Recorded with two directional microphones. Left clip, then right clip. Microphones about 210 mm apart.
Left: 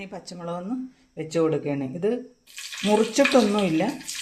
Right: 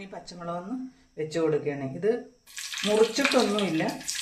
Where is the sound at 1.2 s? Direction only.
35° left (ahead or behind).